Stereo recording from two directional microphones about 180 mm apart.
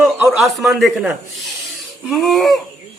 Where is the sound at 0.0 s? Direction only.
10° right (ahead or behind).